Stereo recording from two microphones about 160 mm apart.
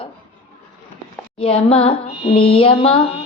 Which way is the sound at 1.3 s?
35° left (ahead or behind).